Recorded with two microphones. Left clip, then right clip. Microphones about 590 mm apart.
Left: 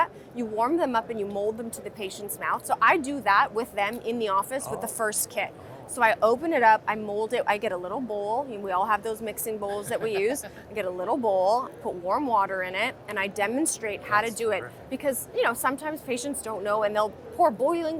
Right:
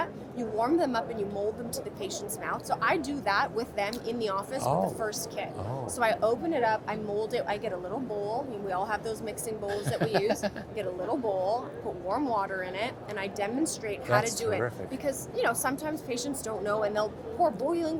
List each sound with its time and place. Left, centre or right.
0.0 s a woman's voice: left